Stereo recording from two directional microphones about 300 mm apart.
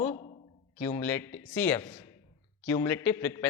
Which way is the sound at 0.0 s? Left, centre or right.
Left.